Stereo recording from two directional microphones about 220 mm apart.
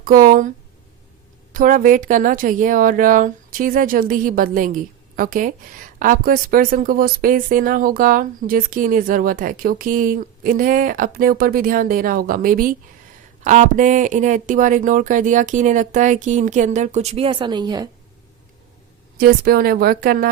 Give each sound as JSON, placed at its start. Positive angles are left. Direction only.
{"t": 0.0, "sound": "speech", "side_deg": -40}
{"t": 1.5, "sound": "speech", "side_deg": -40}
{"t": 19.1, "sound": "speech", "side_deg": -45}